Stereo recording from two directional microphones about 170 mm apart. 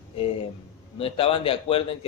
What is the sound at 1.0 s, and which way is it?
A man's voice, 35° left (ahead or behind).